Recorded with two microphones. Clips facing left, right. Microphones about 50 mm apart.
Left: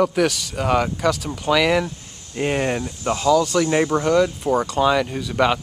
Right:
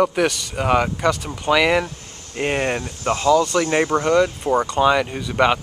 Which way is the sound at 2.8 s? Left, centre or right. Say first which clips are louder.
Right 1 dB; right.